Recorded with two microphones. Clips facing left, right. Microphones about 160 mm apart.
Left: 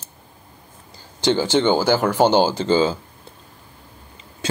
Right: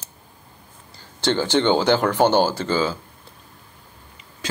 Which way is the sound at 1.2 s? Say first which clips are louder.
Left 2 dB; 10° left (ahead or behind).